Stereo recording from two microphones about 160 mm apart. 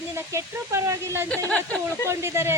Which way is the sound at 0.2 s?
15° right (ahead or behind).